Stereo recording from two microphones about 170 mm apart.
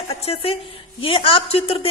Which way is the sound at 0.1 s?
35° left (ahead or behind).